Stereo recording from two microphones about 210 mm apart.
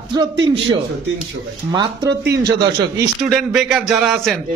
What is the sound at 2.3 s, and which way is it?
Speech, 55° right (ahead or behind).